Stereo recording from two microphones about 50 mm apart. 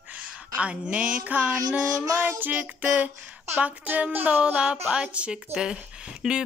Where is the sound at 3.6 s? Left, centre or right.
Right.